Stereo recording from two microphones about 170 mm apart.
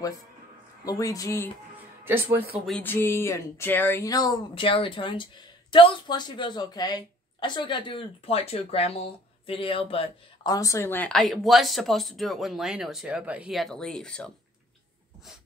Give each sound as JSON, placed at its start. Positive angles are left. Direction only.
{"t": 0.8, "sound": "speech", "side_deg": 20}
{"t": 2.6, "sound": "speech", "side_deg": 10}
{"t": 10.5, "sound": "speech", "side_deg": 20}